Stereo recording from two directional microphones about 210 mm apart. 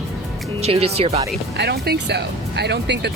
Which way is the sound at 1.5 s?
55° right (ahead or behind).